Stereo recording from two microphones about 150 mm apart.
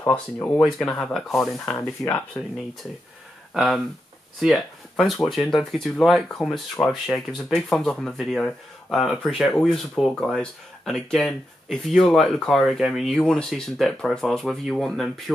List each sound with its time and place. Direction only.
0.0 s speech: 15° left (ahead or behind)
0.6 s speech: 5° left (ahead or behind)
1.7 s speech: 20° left (ahead or behind)
3.5 s speech: centre (ahead or behind)